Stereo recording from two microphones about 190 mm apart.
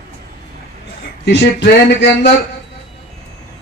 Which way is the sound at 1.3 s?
60° left (ahead or behind).